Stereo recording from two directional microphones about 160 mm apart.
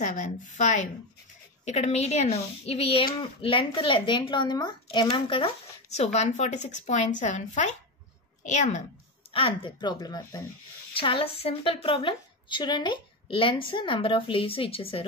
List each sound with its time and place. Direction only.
0.0 s a woman's voice: 50° left (ahead or behind)
9.3 s a woman's voice: 35° left (ahead or behind)
11.0 s a woman's voice: 35° left (ahead or behind)